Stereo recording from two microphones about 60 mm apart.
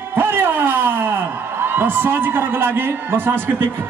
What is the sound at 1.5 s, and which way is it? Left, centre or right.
A man's voice, right.